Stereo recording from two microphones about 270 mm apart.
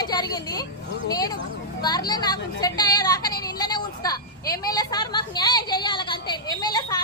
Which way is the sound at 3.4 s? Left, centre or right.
Centre.